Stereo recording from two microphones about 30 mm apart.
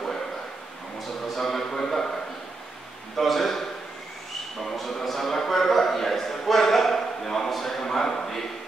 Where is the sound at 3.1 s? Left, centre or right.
Centre.